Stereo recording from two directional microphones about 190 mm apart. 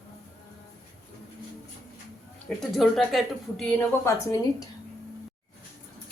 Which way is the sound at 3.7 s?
15° left (ahead or behind).